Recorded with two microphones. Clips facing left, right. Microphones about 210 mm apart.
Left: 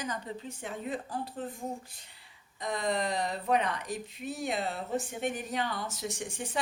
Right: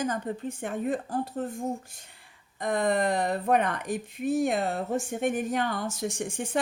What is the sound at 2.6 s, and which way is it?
Speech, 55° right (ahead or behind).